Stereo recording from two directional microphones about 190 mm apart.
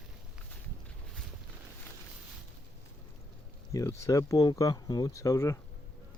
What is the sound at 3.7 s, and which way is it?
Speech, 15° left (ahead or behind).